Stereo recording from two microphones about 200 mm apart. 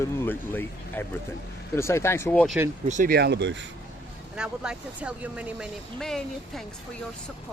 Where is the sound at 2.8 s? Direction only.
40° right (ahead or behind); by 3.6 s 60° right (ahead or behind).